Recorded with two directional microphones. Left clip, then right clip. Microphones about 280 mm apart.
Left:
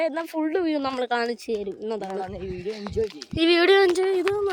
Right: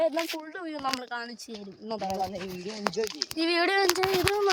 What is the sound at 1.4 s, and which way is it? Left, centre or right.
Speech, centre.